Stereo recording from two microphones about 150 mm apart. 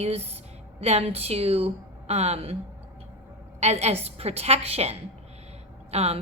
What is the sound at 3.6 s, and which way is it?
A woman's voice, 45° right (ahead or behind).